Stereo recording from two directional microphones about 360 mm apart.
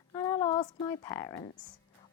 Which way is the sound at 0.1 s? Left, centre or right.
Centre.